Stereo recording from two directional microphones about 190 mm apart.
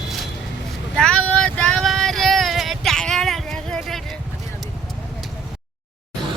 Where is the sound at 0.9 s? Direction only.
5° left (ahead or behind).